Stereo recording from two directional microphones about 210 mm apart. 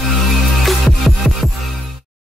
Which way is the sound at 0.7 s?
Centre (ahead or behind).